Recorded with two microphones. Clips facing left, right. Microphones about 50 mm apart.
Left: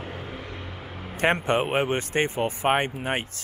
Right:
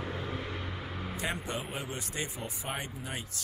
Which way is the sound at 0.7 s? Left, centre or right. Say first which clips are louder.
Left 1 dB; centre.